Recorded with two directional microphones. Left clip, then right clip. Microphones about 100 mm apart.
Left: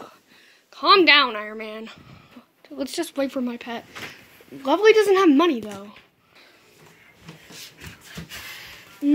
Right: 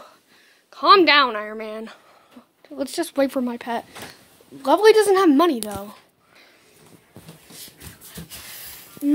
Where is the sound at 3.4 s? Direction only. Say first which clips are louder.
Right 4 dB; 30° right (ahead or behind).